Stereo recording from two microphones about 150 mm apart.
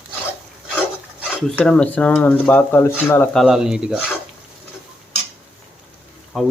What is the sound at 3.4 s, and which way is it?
Speech, 5° right (ahead or behind).